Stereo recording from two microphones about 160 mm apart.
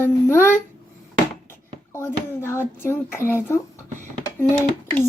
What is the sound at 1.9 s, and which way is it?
Speech, 15° left (ahead or behind).